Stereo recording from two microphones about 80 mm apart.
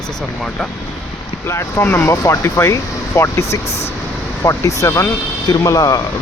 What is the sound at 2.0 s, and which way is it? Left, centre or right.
Speech, left.